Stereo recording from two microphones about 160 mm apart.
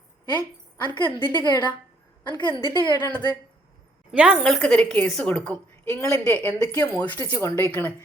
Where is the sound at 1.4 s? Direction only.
30° left (ahead or behind).